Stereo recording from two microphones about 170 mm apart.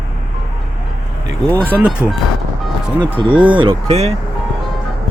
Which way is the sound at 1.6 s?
10° right (ahead or behind).